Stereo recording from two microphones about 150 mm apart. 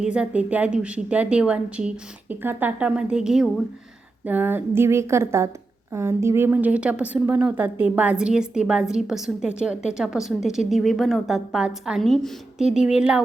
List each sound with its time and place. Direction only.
0.0 s a woman's voice: 5° right (ahead or behind)